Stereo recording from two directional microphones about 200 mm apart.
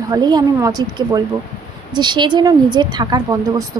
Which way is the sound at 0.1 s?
20° right (ahead or behind).